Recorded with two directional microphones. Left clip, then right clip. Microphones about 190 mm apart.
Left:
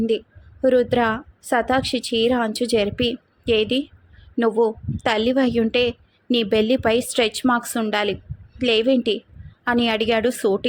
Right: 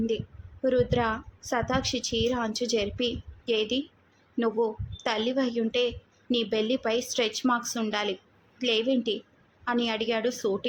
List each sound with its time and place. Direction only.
0.6 s a woman's voice: 25° left (ahead or behind)